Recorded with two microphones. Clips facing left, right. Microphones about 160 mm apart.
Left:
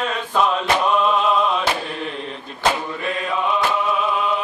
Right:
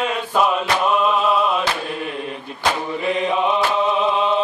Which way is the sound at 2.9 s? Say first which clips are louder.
Right 4 dB; 20° right (ahead or behind).